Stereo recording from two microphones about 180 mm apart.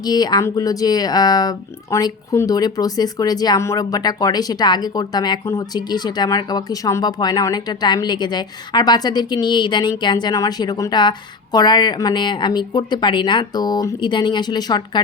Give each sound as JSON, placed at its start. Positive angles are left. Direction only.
{"t": 0.0, "sound": "speech", "side_deg": 20}